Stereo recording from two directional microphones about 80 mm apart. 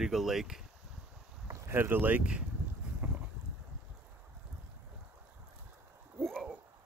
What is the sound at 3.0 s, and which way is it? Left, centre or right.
Boat, centre.